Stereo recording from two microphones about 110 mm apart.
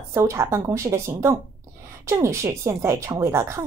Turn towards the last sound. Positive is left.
turn(degrees=-25)  # may be behind; listen again after turning